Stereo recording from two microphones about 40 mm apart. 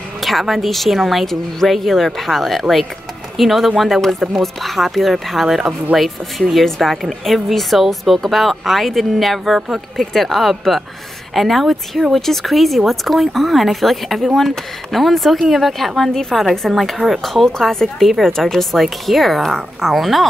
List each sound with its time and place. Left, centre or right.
0.2 s speech: centre